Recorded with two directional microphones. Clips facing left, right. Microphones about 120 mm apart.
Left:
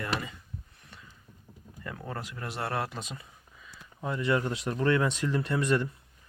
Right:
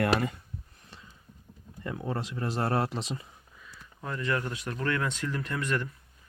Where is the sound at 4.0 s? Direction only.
15° left (ahead or behind).